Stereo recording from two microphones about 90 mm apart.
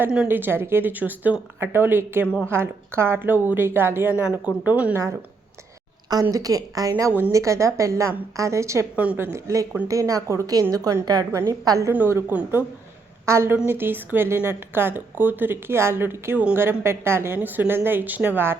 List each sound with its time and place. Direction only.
0.3 s a woman's voice: 25° right (ahead or behind)
6.3 s a woman's voice: 40° right (ahead or behind)
11.3 s a woman's voice: 30° right (ahead or behind)
11.9 s a woman's voice: 25° right (ahead or behind)